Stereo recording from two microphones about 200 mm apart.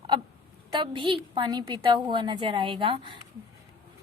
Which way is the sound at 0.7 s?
25° right (ahead or behind).